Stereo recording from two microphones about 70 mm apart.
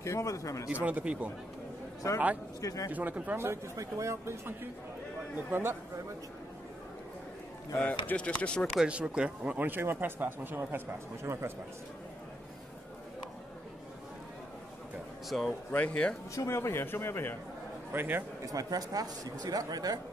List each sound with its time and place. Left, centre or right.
0.0 s speech: left
0.7 s speech: right
2.0 s speech: left
2.9 s speech: right
3.3 s speech: right
5.5 s speech: right
8.1 s speech: left
8.8 s speech: centre; by 10.8 s right
11.3 s speech: right
15.2 s speech: centre
15.7 s speech: centre
16.3 s speech: left
17.9 s speech: right
18.4 s speech: right